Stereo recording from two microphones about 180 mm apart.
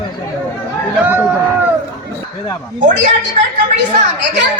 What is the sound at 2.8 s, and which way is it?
Speech, 45° right (ahead or behind).